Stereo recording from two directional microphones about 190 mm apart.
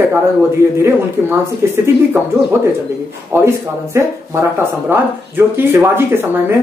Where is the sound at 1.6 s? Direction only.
15° right (ahead or behind).